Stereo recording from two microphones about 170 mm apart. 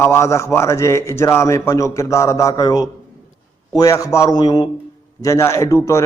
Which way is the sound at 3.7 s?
20° left (ahead or behind).